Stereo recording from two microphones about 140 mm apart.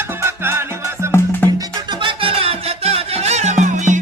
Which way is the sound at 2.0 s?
40° right (ahead or behind).